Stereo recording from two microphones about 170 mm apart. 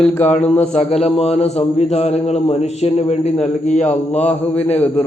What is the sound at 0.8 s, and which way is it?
A man's voice, 40° left (ahead or behind).